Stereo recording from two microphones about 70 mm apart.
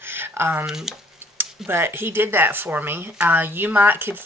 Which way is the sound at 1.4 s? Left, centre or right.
Right.